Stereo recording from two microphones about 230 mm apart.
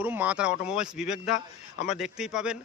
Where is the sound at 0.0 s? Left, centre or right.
Centre.